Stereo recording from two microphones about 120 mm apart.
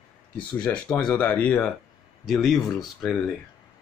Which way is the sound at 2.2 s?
Centre (ahead or behind).